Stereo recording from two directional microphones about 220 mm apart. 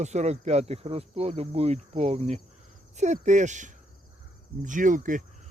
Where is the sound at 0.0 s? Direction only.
30° right (ahead or behind).